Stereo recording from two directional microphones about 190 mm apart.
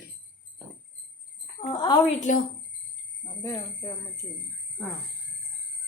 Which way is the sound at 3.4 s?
15° left (ahead or behind).